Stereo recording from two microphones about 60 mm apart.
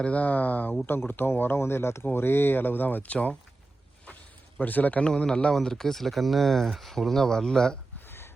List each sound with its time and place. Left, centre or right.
0.0 s speech: left
4.6 s speech: left; by 7.8 s centre
8.0 s a sound: left